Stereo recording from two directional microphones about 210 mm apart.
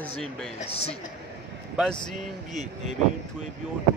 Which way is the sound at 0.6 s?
30° left (ahead or behind).